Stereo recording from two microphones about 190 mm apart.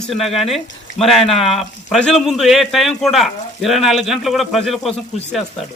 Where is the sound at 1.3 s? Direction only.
30° left (ahead or behind).